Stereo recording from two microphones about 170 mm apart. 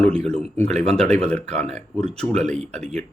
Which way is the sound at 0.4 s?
40° right (ahead or behind).